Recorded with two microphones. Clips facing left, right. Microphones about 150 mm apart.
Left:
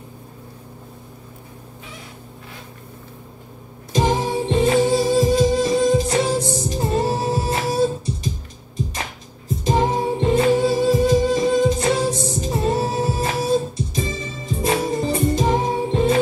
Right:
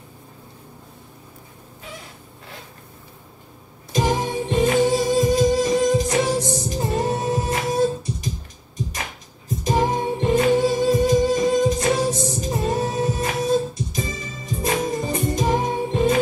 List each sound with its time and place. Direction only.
3.9 s music: 25° left (ahead or behind)
9.6 s music: 30° left (ahead or behind)